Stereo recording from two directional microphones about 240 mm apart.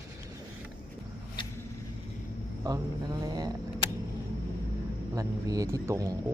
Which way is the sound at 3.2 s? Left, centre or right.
Centre.